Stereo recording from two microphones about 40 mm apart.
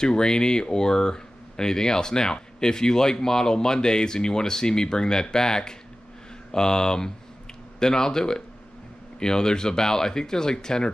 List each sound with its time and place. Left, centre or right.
0.0 s speech: centre